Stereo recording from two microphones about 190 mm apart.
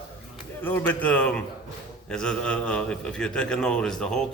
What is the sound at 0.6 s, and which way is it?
A man's voice, 10° left (ahead or behind).